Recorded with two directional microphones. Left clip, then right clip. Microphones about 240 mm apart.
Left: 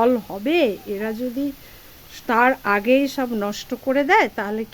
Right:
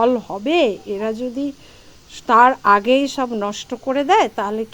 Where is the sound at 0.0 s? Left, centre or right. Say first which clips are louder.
Right 2 dB; centre.